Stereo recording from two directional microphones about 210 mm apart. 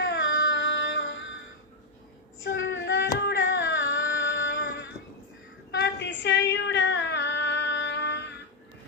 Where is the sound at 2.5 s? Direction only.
60° left (ahead or behind).